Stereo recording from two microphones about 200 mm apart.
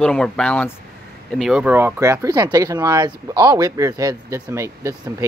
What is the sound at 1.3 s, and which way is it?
Speech, 5° right (ahead or behind).